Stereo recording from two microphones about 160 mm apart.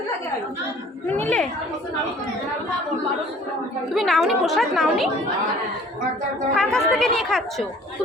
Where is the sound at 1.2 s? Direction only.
10° left (ahead or behind).